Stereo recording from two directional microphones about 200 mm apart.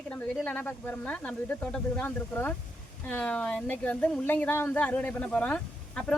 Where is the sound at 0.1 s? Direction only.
10° left (ahead or behind).